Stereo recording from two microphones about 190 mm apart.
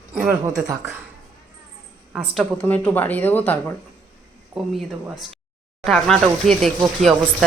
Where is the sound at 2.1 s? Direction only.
5° right (ahead or behind).